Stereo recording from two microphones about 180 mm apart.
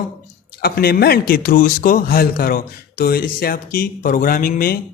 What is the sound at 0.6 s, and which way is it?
A man's voice, 60° left (ahead or behind).